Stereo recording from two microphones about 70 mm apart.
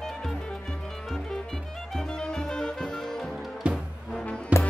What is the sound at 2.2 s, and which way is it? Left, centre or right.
Music, centre.